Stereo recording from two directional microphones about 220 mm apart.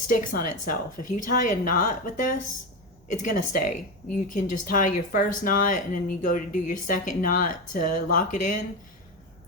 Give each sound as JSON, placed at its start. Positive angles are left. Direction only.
{"t": 0.1, "sound": "speech", "side_deg": 40}